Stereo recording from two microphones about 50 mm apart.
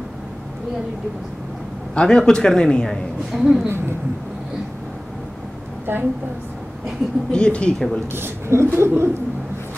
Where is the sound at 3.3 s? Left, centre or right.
Centre.